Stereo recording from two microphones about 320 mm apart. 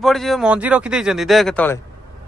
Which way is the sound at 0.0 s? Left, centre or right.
Centre.